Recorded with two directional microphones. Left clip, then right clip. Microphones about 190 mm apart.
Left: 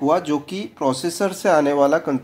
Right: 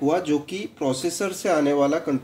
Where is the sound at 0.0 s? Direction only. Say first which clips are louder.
Left 3 dB; 35° left (ahead or behind).